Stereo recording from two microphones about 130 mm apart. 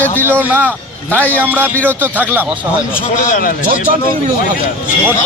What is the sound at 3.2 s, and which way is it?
Speech, 90° left.